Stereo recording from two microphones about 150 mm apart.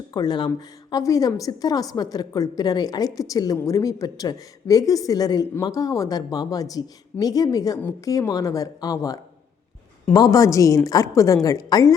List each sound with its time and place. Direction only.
0.1 s a woman's voice: 25° left (ahead or behind)